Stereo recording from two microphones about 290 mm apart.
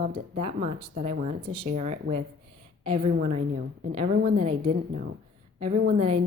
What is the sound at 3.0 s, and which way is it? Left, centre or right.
Speech, right.